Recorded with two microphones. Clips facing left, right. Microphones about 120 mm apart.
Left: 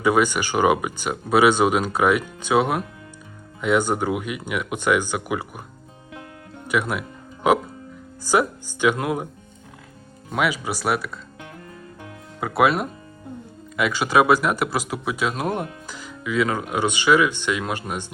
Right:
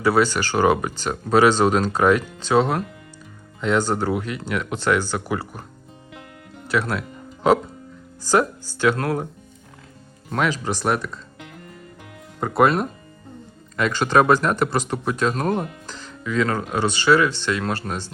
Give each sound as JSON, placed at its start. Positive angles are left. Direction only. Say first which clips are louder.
{"t": 0.0, "sound": "speech", "louder": "right 1 dB", "side_deg": 15}
{"t": 6.7, "sound": "speech", "louder": "even", "side_deg": 15}
{"t": 10.3, "sound": "speech", "louder": "right 1 dB", "side_deg": 10}
{"t": 12.4, "sound": "speech", "louder": "right 1 dB", "side_deg": 5}